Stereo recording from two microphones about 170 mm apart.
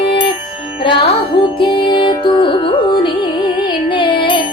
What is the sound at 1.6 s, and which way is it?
Music, 30° left (ahead or behind).